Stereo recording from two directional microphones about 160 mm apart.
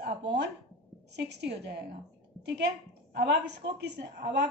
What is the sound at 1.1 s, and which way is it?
Speech, 90° right.